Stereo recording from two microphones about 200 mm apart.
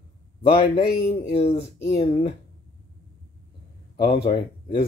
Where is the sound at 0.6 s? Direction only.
30° left (ahead or behind).